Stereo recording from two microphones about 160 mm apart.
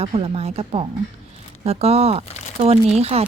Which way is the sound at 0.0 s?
40° right (ahead or behind).